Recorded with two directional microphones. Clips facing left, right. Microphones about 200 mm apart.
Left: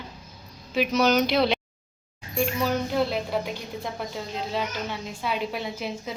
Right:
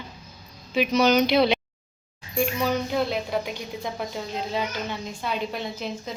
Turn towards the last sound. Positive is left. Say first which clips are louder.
# even
turn(degrees=10)  # may be behind; listen again after turning